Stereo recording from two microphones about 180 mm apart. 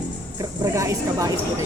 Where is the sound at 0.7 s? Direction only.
15° right (ahead or behind).